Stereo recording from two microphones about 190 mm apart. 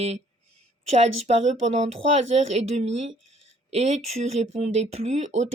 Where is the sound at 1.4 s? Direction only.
35° right (ahead or behind).